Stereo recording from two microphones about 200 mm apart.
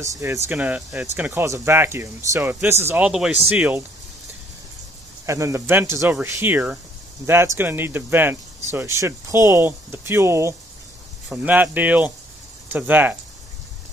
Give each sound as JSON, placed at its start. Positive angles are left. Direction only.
{"t": 0.0, "sound": "speech", "side_deg": -15}
{"t": 5.2, "sound": "speech", "side_deg": -15}